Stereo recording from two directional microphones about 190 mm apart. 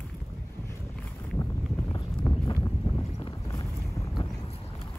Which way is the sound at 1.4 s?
20° left (ahead or behind).